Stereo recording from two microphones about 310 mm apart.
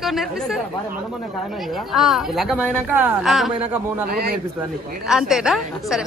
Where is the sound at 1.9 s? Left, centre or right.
Centre.